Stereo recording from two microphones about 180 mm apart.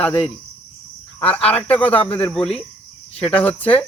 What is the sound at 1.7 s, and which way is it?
Cricket, 10° left (ahead or behind).